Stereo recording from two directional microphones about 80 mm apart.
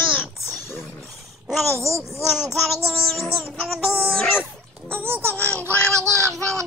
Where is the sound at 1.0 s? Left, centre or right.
Centre.